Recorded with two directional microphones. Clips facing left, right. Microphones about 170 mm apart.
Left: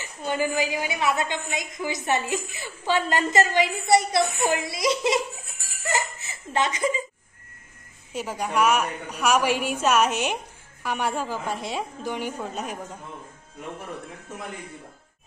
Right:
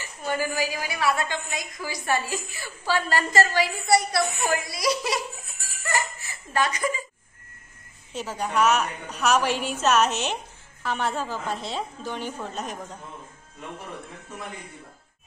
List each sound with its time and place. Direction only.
0.2 s a woman's voice: 20° left (ahead or behind)
5.8 s laughter: 20° left (ahead or behind)
8.1 s a woman's voice: 10° left (ahead or behind)